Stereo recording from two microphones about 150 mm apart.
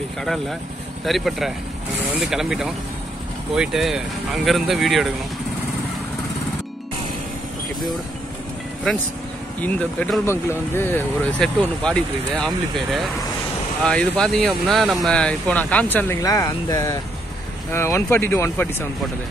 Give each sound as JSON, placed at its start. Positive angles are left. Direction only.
{"t": 0.2, "sound": "speech", "side_deg": 0}
{"t": 9.6, "sound": "speech", "side_deg": 10}
{"t": 10.2, "sound": "speech", "side_deg": 15}